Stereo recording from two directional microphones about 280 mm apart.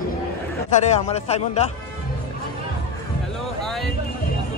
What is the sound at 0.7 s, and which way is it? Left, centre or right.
Speech, left.